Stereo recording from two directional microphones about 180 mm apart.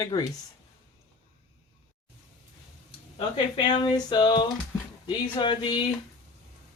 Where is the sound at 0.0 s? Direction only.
20° left (ahead or behind).